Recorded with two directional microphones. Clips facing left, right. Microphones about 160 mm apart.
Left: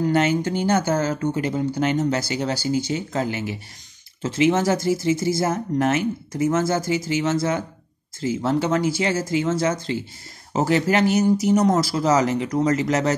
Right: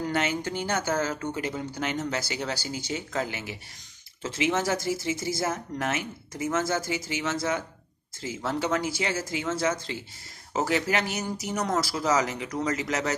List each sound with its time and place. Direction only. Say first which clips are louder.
0.1 s speech: left 8 dB; 30° left (ahead or behind)